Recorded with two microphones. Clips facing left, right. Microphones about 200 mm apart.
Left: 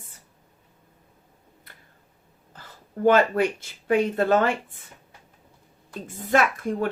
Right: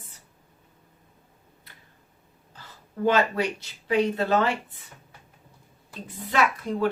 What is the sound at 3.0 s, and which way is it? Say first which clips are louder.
A woman's voice: left 4 dB; 50° left (ahead or behind).